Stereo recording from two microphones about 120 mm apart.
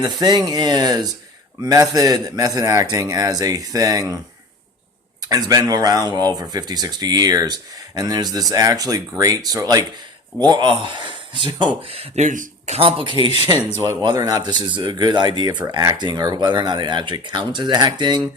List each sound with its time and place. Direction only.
0.0 s a man's voice: 35° right (ahead or behind)
5.3 s speech: 30° right (ahead or behind)
11.9 s speech: 60° right (ahead or behind); by 12.8 s 85° right
12.8 s speech: 45° right (ahead or behind)
14.0 s speech: 30° right (ahead or behind)